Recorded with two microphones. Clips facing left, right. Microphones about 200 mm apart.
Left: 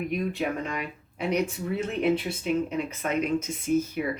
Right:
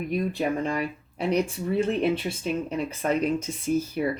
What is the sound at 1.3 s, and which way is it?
Speech, 30° right (ahead or behind).